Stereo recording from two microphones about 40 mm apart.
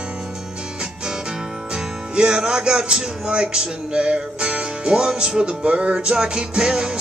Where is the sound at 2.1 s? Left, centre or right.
Right.